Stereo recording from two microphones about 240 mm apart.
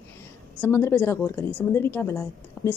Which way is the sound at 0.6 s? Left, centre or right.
Centre.